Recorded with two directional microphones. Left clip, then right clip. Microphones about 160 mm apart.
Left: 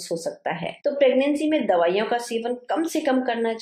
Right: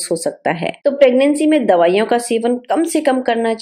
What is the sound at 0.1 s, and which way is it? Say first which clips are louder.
Speech: right 9 dB; 45° right (ahead or behind).